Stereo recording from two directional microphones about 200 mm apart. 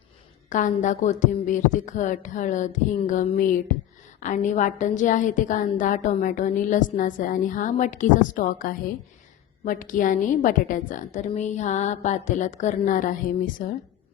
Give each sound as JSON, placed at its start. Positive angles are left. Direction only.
{"t": 0.5, "sound": "a woman's voice", "side_deg": 40}